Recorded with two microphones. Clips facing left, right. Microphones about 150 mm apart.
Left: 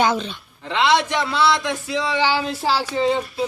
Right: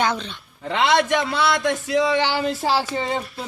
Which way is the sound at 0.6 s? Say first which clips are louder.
Even; 50° right (ahead or behind).